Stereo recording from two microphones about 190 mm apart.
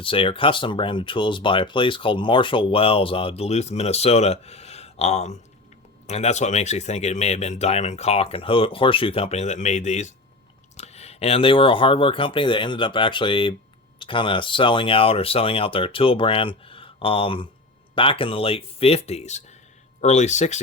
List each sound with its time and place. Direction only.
0.0 s speech: 30° left (ahead or behind)